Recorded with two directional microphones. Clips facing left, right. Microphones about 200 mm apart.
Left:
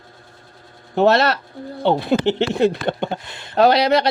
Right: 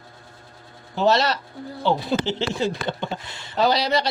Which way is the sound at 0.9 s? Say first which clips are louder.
Left 5 dB; 60° left (ahead or behind).